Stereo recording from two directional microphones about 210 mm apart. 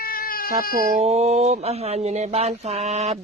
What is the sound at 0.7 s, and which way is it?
Speech, 40° right (ahead or behind).